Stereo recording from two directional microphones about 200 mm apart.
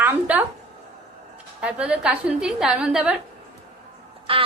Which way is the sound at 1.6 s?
5° right (ahead or behind).